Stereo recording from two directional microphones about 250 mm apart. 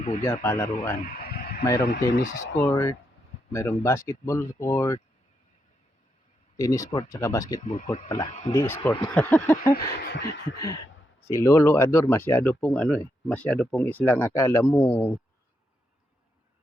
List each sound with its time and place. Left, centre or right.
0.2 s a man's voice: centre
1.0 s radio: left
1.6 s a man's voice: centre
1.9 s a sound: left
3.5 s a man's voice: centre
6.6 s a man's voice: centre
7.6 s speech: left
8.5 s a man's voice: centre
9.7 s a sound: left
11.3 s a man's voice: centre